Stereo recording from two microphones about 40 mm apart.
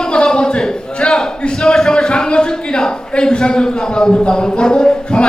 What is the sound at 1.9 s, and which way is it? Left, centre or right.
A man's voice, centre.